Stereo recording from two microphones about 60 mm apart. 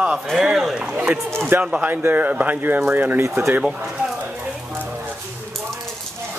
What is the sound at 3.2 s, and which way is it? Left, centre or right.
Speech, right.